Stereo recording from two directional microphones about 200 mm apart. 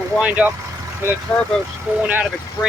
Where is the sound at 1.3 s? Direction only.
5° left (ahead or behind).